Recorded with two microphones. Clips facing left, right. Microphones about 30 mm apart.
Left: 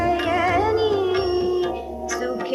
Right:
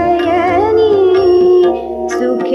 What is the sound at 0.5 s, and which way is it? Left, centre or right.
Music, right.